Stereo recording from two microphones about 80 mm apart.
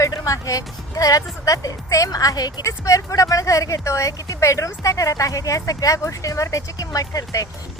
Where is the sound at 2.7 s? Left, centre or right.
Left.